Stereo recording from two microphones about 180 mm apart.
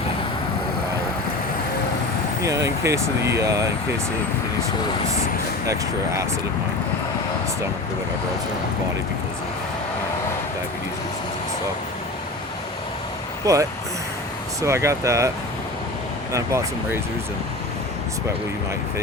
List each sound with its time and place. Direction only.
2.4 s speech: 20° right (ahead or behind)
5.6 s speech: 15° right (ahead or behind)
13.4 s speech: 20° right (ahead or behind)
16.3 s speech: 15° right (ahead or behind)